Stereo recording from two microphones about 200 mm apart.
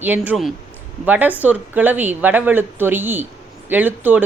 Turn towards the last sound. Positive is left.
turn(degrees=-10)  # may be behind; listen again after turning